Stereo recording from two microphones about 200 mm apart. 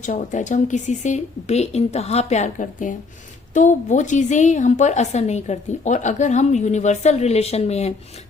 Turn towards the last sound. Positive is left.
turn(degrees=35)  # may be behind; listen again after turning